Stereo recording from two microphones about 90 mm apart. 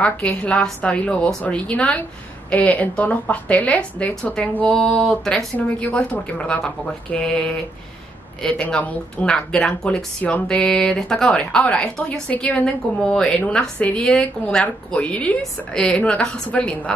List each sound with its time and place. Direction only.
0.0 s speech: 15° left (ahead or behind)
4.1 s speech: 5° left (ahead or behind)